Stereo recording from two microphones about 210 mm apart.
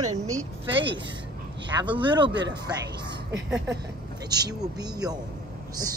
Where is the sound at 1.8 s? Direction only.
25° right (ahead or behind).